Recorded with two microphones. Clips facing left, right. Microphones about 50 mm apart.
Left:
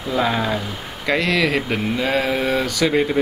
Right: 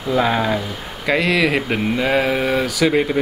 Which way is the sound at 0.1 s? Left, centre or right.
Centre.